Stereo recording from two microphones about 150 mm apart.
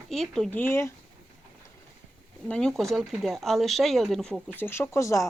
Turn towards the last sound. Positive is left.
turn(degrees=20)  # may be behind; listen again after turning